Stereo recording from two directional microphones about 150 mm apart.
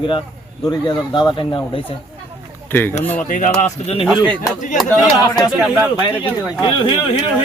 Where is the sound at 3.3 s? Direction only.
55° left (ahead or behind).